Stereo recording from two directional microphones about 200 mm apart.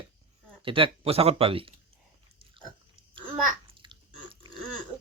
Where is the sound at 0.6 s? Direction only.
25° right (ahead or behind).